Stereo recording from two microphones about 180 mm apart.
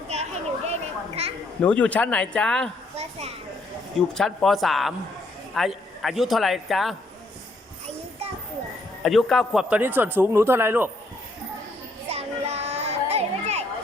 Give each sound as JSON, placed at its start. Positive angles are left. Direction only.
{"t": 0.1, "sound": "a sound", "side_deg": -35}
{"t": 1.6, "sound": "speech", "side_deg": 5}
{"t": 3.0, "sound": "a sound", "side_deg": -35}
{"t": 4.1, "sound": "a man's voice", "side_deg": 5}
{"t": 9.0, "sound": "a man's voice", "side_deg": 0}
{"t": 12.0, "sound": "children playing", "side_deg": -35}